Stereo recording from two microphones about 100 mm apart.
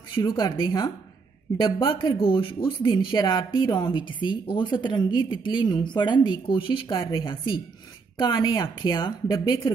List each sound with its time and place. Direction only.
0.1 s a woman's voice: 45° left (ahead or behind)
6.9 s a woman's voice: 45° left (ahead or behind)
8.2 s a woman's voice: 45° left (ahead or behind)